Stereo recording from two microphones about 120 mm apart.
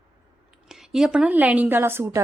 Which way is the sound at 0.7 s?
5° right (ahead or behind).